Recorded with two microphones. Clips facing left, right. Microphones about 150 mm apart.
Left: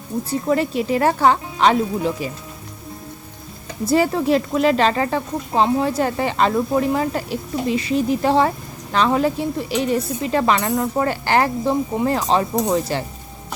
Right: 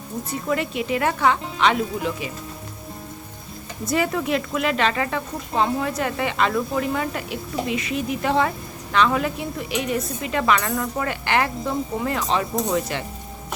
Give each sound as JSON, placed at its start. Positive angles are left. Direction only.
{"t": 0.3, "sound": "speech", "side_deg": 35}
{"t": 3.8, "sound": "speech", "side_deg": 30}